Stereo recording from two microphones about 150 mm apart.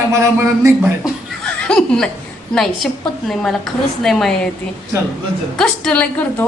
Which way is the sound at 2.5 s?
5° left (ahead or behind).